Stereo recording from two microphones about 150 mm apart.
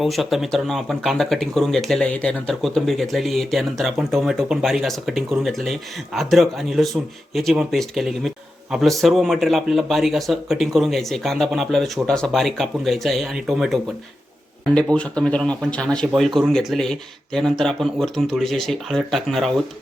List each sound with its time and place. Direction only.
0.0 s speech: centre (ahead or behind)
14.9 s speech: 5° left (ahead or behind)